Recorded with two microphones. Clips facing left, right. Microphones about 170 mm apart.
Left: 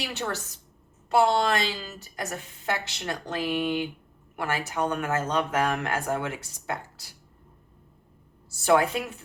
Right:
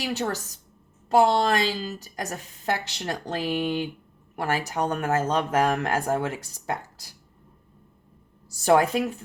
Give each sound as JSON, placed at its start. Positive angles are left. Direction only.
{"t": 0.1, "sound": "speech", "side_deg": -40}
{"t": 8.6, "sound": "speech", "side_deg": -40}